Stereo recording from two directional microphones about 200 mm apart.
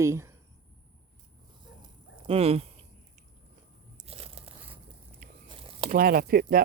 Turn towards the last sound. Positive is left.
turn(degrees=-50)  # may be behind; listen again after turning